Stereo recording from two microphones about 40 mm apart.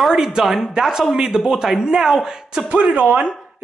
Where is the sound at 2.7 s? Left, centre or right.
Right.